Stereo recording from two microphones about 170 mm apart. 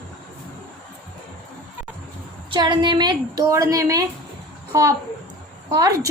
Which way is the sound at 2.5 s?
25° right (ahead or behind).